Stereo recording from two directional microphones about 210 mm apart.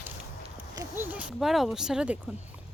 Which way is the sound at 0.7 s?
15° right (ahead or behind).